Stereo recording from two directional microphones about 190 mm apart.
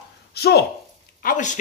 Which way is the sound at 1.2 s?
45° left (ahead or behind).